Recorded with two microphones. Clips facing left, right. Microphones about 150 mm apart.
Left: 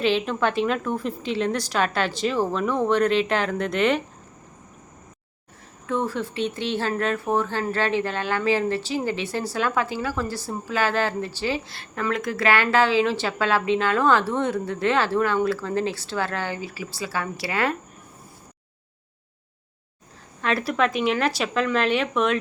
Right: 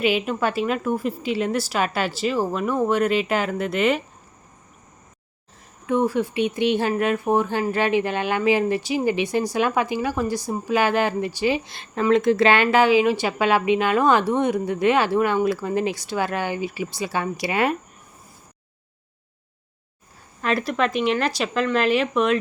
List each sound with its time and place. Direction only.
0.0 s speech: 10° right (ahead or behind)
5.8 s speech: 15° right (ahead or behind)
20.4 s speech: centre (ahead or behind)